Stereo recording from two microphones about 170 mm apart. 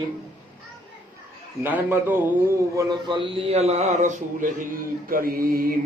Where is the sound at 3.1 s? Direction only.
30° right (ahead or behind); by 5.7 s 60° right (ahead or behind).